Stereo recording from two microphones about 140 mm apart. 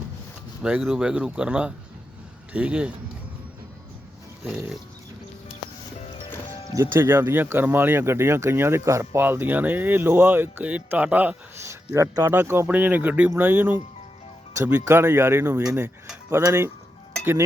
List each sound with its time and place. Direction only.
0.6 s speech: 5° right (ahead or behind)
6.7 s speech: 15° right (ahead or behind)
16.3 s a sound: 20° right (ahead or behind)